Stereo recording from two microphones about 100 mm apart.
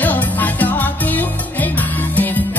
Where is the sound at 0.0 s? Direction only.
15° left (ahead or behind).